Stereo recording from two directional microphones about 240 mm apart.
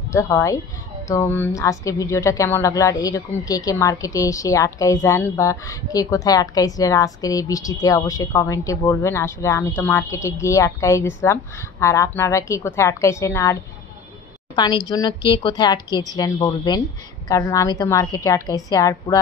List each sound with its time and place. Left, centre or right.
0.1 s a woman's voice: centre